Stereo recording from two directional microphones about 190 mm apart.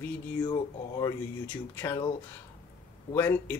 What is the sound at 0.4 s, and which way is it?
Speech, 20° left (ahead or behind).